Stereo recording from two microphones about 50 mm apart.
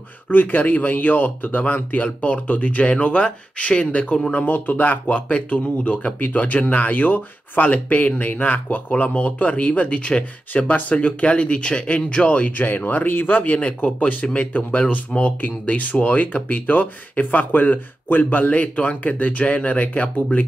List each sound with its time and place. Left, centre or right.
0.3 s speech: left